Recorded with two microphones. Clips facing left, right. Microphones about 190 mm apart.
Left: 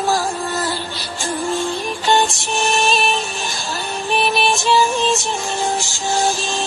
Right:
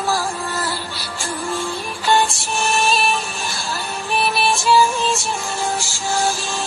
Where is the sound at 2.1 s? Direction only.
20° left (ahead or behind).